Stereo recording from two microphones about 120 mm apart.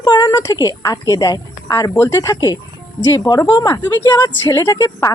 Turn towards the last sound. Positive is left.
turn(degrees=30)  # may be behind; listen again after turning